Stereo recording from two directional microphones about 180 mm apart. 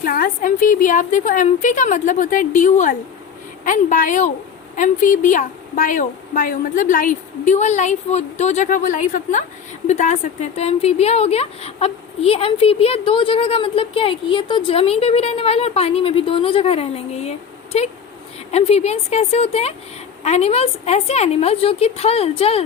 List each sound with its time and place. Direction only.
0.0 s a woman's voice: 50° left (ahead or behind); by 22.6 s 35° left (ahead or behind)